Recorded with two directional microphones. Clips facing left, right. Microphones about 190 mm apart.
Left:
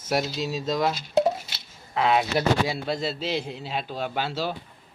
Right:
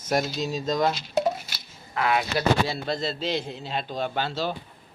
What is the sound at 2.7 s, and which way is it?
A man's voice, 10° left (ahead or behind).